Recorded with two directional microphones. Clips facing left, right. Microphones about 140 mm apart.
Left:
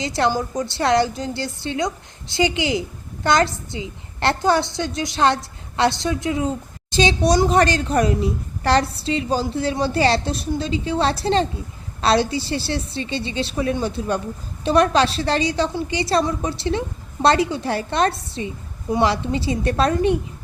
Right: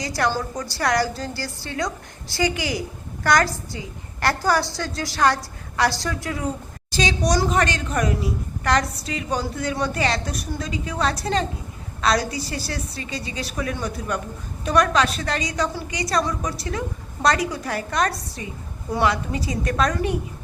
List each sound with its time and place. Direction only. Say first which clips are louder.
0.0 s a woman's voice: left 3 dB; 25° left (ahead or behind)